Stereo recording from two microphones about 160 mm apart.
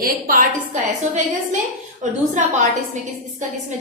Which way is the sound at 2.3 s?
50° right (ahead or behind).